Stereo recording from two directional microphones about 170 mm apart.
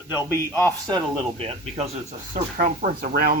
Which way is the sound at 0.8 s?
30° right (ahead or behind).